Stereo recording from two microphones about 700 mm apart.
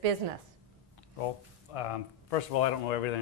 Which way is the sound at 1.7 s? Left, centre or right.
Left.